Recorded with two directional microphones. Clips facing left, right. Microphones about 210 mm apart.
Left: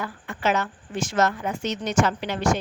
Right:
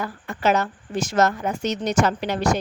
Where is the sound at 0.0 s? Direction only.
40° right (ahead or behind).